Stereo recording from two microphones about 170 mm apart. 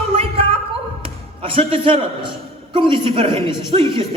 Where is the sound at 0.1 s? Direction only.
30° right (ahead or behind).